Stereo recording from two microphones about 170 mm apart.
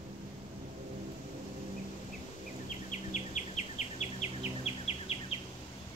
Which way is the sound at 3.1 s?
45° left (ahead or behind).